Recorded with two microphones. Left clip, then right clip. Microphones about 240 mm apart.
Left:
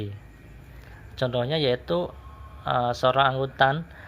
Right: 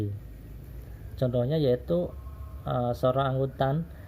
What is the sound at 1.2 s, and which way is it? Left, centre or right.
Speech, left.